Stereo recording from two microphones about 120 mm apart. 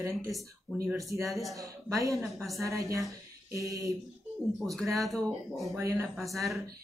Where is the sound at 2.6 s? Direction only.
25° right (ahead or behind).